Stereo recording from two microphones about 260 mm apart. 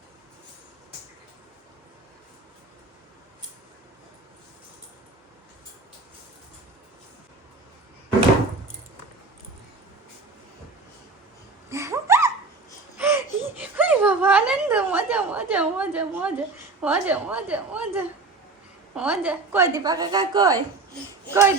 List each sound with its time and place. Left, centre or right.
11.7 s a sound: centre
13.0 s whimper: centre
16.8 s a woman's voice: centre